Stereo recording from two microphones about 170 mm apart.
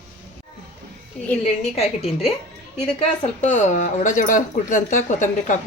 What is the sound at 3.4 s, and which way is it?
Speech, 45° left (ahead or behind).